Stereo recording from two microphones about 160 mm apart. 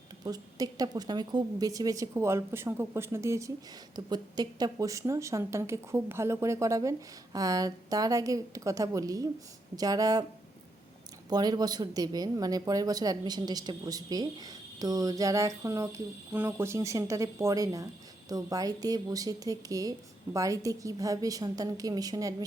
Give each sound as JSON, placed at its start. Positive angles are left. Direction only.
{"t": 0.3, "sound": "speech", "side_deg": -25}
{"t": 11.3, "sound": "speech", "side_deg": -25}